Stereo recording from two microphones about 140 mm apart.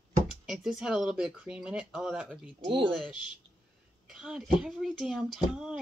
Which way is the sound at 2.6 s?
35° right (ahead or behind).